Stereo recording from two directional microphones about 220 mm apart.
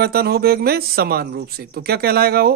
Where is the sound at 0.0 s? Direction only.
45° right (ahead or behind).